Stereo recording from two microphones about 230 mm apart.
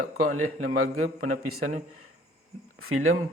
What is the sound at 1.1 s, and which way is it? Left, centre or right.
Speech, right.